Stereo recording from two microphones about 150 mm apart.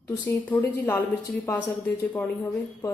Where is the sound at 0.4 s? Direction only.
10° left (ahead or behind).